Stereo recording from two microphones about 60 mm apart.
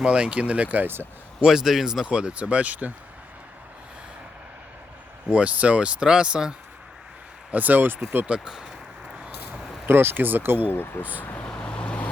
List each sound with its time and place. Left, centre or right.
0.0 s speech: centre
1.4 s a man's voice: centre
2.0 s speech: centre
5.3 s speech: right
7.5 s speech: right
8.3 s a man's voice: centre
9.8 s speech: right
10.7 s speech: left
11.4 s vehicle: centre